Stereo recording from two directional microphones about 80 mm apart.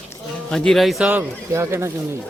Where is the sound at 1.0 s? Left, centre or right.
Centre.